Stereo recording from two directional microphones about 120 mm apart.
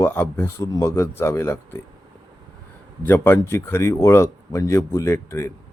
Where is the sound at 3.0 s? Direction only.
20° left (ahead or behind).